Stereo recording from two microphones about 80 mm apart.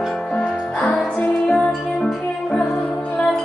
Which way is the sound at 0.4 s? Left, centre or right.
Centre.